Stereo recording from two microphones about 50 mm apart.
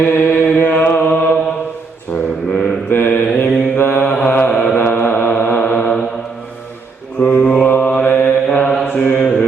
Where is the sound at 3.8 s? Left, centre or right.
Left.